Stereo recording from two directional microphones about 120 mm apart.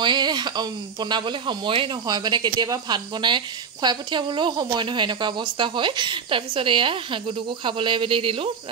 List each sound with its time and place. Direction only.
0.0 s speech: 40° right (ahead or behind)